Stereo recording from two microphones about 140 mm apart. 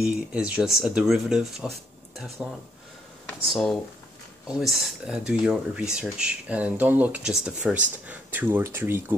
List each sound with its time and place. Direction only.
0.0 s speech: 5° right (ahead or behind)
3.4 s speech: centre (ahead or behind); by 9.0 s 15° right (ahead or behind)